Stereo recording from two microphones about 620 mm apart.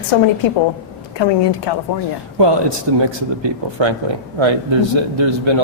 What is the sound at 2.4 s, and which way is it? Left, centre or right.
Speech, right.